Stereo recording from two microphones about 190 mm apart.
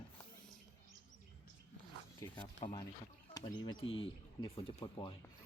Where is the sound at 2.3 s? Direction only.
25° left (ahead or behind).